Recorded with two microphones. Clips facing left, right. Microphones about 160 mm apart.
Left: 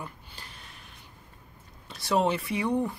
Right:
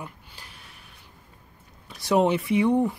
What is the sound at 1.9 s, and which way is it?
Speech, 20° right (ahead or behind).